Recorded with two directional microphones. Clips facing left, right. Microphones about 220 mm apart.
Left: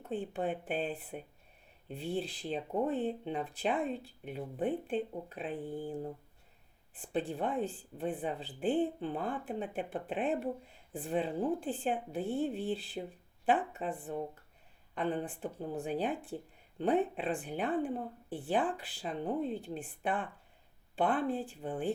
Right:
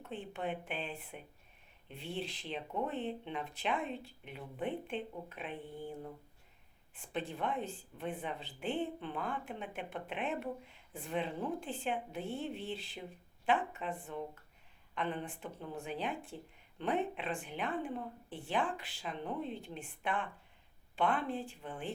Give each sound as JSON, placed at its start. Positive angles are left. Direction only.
{"t": 0.0, "sound": "speech", "side_deg": 35}